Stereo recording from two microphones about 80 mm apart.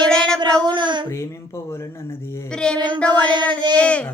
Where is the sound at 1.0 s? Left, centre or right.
Left.